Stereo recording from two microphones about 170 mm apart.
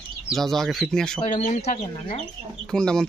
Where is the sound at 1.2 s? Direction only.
45° left (ahead or behind).